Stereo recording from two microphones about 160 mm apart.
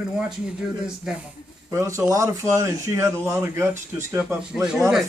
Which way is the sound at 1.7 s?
20° right (ahead or behind).